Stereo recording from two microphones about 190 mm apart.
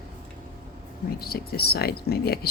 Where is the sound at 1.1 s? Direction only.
55° left (ahead or behind).